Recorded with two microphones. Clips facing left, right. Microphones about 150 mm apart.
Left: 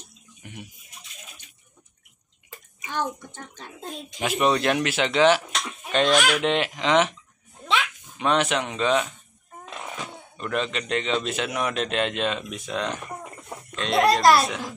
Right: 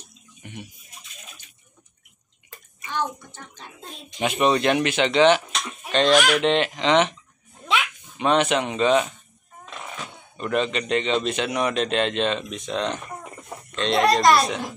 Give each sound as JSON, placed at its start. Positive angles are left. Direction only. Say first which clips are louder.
{"t": 0.4, "sound": "a sound", "louder": "right 2 dB", "side_deg": 5}
{"t": 2.9, "sound": "a child's voice", "louder": "right 1 dB", "side_deg": 45}
{"t": 4.2, "sound": "a man's voice", "louder": "right 2 dB", "side_deg": 0}
{"t": 8.2, "sound": "a man's voice", "louder": "right 3 dB", "side_deg": 0}
{"t": 10.3, "sound": "a man's voice", "louder": "right 4 dB", "side_deg": 0}